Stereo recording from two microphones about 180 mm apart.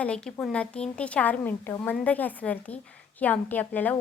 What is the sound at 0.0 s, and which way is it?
A woman's voice, 5° left (ahead or behind).